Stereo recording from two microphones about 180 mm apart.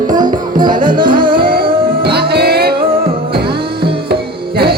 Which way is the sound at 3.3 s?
30° right (ahead or behind).